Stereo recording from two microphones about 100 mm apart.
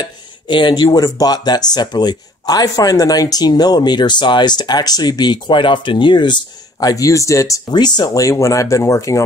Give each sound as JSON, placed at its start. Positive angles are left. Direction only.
{"t": 0.0, "sound": "a sound", "side_deg": 50}
{"t": 0.8, "sound": "speech", "side_deg": 40}
{"t": 7.7, "sound": "speech", "side_deg": 45}